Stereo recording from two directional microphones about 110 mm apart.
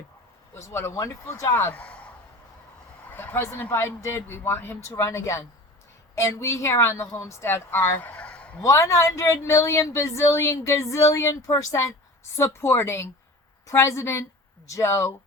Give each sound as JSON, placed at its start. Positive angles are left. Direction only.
{"t": 0.5, "sound": "a woman's voice", "side_deg": 25}
{"t": 3.1, "sound": "a woman's voice", "side_deg": 20}
{"t": 8.6, "sound": "a woman's voice", "side_deg": 25}